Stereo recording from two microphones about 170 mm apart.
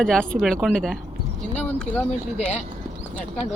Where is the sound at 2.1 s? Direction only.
40° left (ahead or behind).